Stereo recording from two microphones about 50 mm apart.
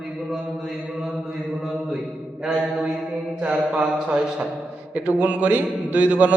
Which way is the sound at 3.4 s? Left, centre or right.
Right.